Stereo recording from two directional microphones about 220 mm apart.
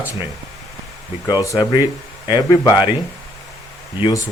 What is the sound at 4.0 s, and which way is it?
Speech, 20° left (ahead or behind).